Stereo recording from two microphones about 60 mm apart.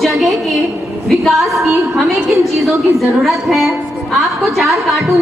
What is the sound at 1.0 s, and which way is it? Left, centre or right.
A woman's voice, centre.